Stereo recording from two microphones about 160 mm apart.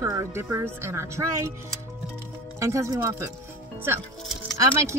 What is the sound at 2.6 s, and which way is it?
Speech, 20° right (ahead or behind).